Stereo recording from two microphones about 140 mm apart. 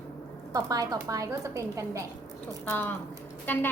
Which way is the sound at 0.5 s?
25° right (ahead or behind).